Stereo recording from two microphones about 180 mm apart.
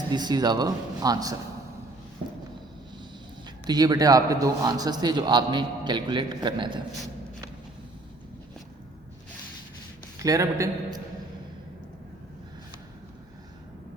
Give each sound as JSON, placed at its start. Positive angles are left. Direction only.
{"t": 0.1, "sound": "a man's voice", "side_deg": -25}
{"t": 3.7, "sound": "a man's voice", "side_deg": -20}
{"t": 10.2, "sound": "a man's voice", "side_deg": -15}